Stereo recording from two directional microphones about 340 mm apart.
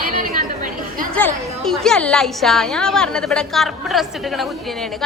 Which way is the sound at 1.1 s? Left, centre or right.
Centre.